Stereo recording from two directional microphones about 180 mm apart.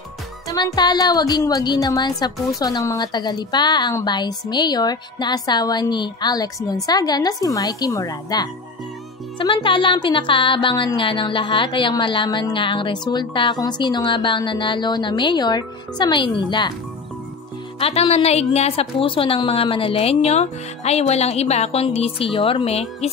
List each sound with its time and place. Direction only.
0.5 s speech: 20° left (ahead or behind)
17.7 s a woman's voice: 35° left (ahead or behind)